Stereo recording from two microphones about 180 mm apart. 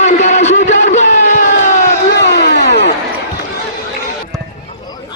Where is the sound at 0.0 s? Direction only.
40° left (ahead or behind).